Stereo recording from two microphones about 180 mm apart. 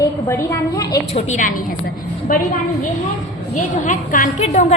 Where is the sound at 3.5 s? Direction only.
45° left (ahead or behind).